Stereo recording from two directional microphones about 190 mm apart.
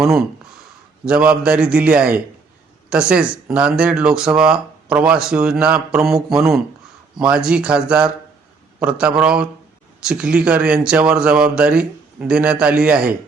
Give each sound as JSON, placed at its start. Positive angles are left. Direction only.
{"t": 0.0, "sound": "a man's voice", "side_deg": 0}